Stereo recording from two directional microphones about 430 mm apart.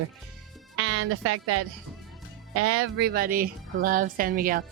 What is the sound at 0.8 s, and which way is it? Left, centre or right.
A woman's voice, right.